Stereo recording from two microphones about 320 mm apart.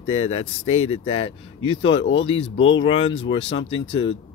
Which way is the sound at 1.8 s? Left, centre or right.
Left.